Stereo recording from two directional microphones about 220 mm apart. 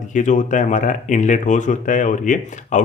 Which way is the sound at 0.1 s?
35° left (ahead or behind).